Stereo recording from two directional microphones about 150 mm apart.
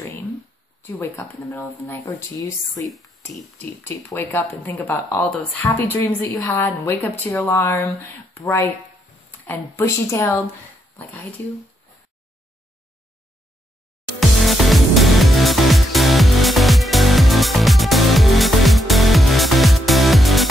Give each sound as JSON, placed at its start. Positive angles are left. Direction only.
{"t": 0.8, "sound": "speech", "side_deg": 15}
{"t": 14.3, "sound": "music", "side_deg": 0}